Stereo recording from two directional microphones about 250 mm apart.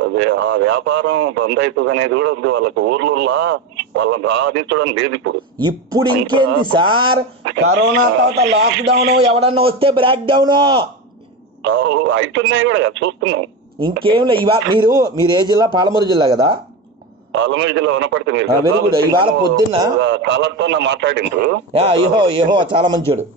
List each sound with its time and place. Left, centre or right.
0.1 s speech: right
5.6 s a man's voice: centre
6.3 s speech: right
6.7 s a man's voice: right
7.4 s speech: right
9.4 s a man's voice: right
11.6 s speech: right
14.0 s a man's voice: centre
17.3 s speech: right
19.1 s a man's voice: centre
20.0 s speech: right
21.7 s a man's voice: centre